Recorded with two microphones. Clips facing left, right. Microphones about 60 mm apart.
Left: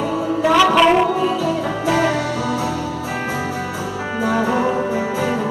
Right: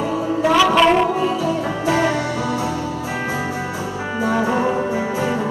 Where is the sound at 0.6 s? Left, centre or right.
Centre.